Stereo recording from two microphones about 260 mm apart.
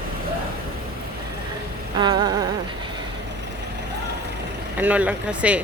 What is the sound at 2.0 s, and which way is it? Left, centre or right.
Speech, centre.